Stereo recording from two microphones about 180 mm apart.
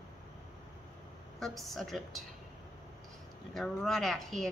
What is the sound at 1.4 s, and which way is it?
Speech, centre (ahead or behind).